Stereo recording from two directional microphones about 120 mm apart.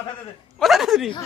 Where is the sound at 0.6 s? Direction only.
Centre (ahead or behind).